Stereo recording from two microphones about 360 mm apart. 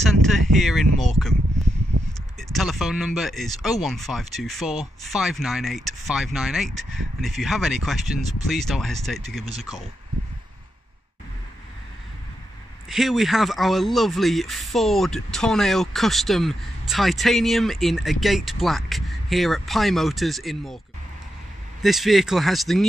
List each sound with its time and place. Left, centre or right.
0.3 s a sound: centre
0.9 s speech: centre
1.9 s a sound: right
2.3 s speech: centre
12.8 s speech: centre
21.8 s speech: centre